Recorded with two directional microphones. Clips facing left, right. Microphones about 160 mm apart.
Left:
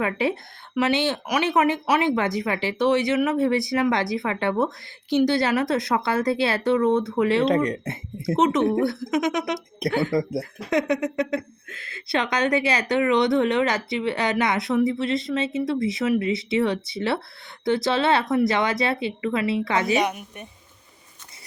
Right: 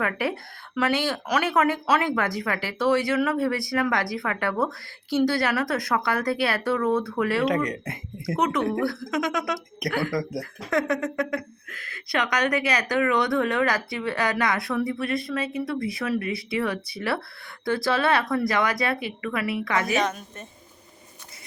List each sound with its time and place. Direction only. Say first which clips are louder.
0.0 s a woman's voice: left 3 dB; 20° left (ahead or behind)